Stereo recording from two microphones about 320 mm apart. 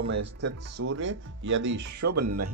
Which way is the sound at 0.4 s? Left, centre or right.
Right.